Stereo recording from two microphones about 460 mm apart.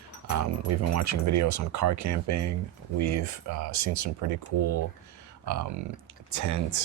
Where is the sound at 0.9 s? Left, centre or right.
Right.